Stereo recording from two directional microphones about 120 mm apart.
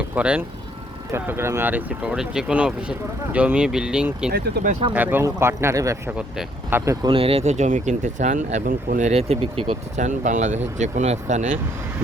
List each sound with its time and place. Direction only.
0.1 s speech: 10° right (ahead or behind)
1.1 s speech: 20° right (ahead or behind)
4.8 s speech: 45° right (ahead or behind)
5.2 s speech: 20° right (ahead or behind)
6.1 s speech: 10° right (ahead or behind)
7.0 s speech: 50° right (ahead or behind)
10.0 s speech: 90° right